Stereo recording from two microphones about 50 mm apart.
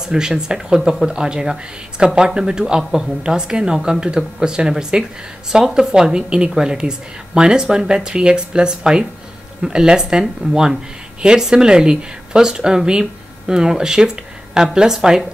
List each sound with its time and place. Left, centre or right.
0.1 s a woman's voice: centre